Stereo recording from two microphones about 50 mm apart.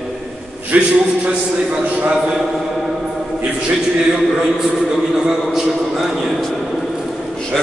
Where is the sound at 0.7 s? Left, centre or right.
Right.